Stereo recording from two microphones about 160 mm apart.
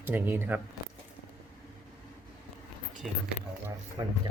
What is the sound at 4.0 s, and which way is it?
Speech, 30° right (ahead or behind).